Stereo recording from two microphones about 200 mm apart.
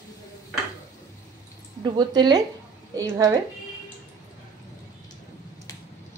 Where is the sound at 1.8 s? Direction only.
20° right (ahead or behind).